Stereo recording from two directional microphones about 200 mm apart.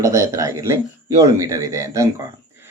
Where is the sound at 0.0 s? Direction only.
15° right (ahead or behind).